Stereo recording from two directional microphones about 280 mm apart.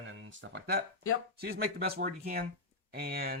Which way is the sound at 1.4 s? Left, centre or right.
Right.